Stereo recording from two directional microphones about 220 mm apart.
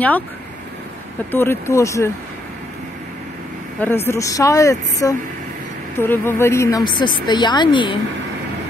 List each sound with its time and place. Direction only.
1.3 s speech: 10° left (ahead or behind)
3.8 s a woman's voice: 10° left (ahead or behind)